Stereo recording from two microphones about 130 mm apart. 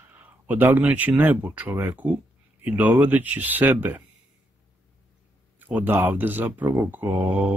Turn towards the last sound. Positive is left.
turn(degrees=-10)  # may be behind; listen again after turning